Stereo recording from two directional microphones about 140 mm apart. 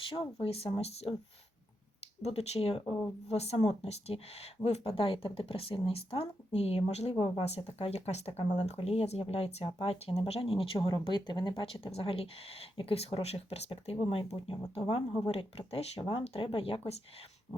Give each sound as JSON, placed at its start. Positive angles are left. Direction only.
{"t": 0.1, "sound": "speech", "side_deg": 40}
{"t": 2.2, "sound": "speech", "side_deg": 50}
{"t": 16.0, "sound": "speech", "side_deg": 35}